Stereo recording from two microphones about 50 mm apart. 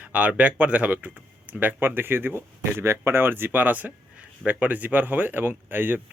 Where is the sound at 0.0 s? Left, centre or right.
Right.